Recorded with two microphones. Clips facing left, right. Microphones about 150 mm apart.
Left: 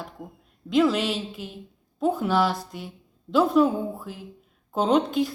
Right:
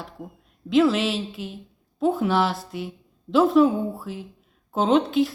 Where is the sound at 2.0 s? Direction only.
Centre (ahead or behind).